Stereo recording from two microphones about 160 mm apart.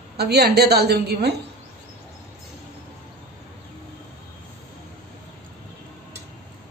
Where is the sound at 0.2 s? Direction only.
90° right.